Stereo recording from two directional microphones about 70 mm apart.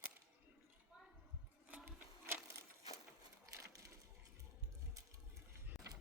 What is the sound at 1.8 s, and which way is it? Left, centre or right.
Sewing machine, right.